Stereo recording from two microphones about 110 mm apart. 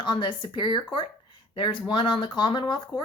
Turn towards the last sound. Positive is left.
turn(degrees=45)  # may be behind; listen again after turning